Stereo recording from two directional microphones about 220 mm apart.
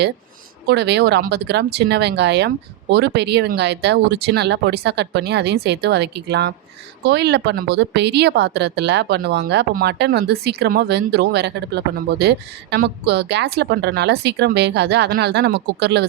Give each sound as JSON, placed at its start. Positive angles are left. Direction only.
{"t": 0.7, "sound": "a woman's voice", "side_deg": -50}